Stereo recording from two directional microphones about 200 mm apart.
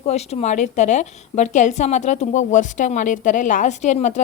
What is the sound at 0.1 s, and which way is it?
A woman's voice, 30° left (ahead or behind).